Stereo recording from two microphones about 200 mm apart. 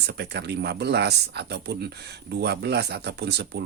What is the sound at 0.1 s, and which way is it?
Speech, 55° right (ahead or behind).